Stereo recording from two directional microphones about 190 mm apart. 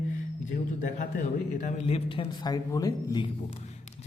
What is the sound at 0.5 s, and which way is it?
Speech, 40° left (ahead or behind).